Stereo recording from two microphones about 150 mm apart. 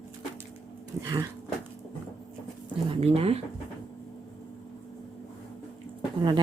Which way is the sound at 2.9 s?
40° right (ahead or behind).